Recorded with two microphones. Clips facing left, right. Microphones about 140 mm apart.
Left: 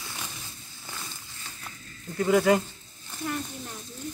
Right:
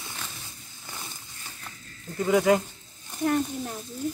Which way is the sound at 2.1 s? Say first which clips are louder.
Even; centre (ahead or behind).